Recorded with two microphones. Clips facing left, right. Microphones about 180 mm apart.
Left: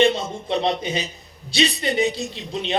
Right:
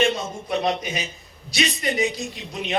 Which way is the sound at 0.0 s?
30° left (ahead or behind).